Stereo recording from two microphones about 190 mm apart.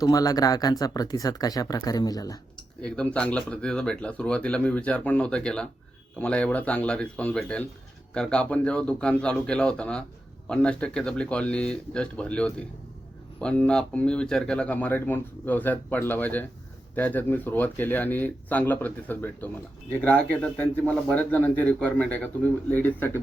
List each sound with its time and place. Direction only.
0.0 s speech: 20° left (ahead or behind)
2.8 s speech: 5° left (ahead or behind)